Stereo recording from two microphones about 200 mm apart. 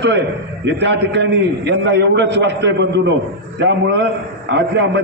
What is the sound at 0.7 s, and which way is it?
A man's voice, 60° right (ahead or behind).